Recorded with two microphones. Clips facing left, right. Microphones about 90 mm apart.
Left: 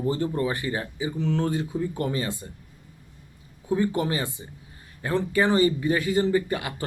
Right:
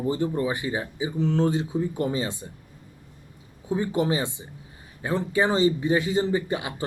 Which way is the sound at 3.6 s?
20° right (ahead or behind).